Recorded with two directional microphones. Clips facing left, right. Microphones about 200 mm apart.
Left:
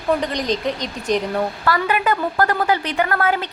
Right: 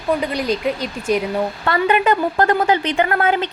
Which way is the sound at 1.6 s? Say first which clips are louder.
Right 5 dB; 25° right (ahead or behind).